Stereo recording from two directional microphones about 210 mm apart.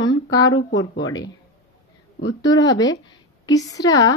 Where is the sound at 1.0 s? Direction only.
20° left (ahead or behind).